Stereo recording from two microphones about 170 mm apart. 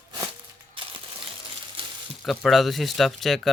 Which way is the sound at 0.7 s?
30° right (ahead or behind).